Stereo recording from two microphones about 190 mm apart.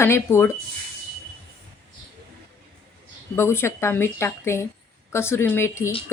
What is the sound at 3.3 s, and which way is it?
Speech, 15° left (ahead or behind).